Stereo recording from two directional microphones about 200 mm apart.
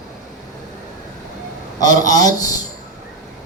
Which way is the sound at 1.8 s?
20° left (ahead or behind).